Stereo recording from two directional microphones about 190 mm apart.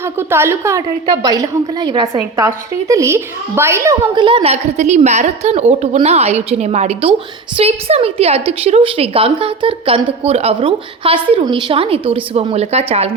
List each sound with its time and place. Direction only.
0.0 s a woman's voice: 10° right (ahead or behind); by 13.1 s 35° right (ahead or behind)